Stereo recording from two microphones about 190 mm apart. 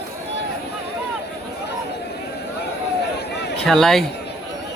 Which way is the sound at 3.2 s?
60° left (ahead or behind).